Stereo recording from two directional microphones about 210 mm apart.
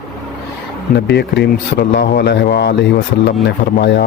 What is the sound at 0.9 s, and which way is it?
Speech, 50° left (ahead or behind).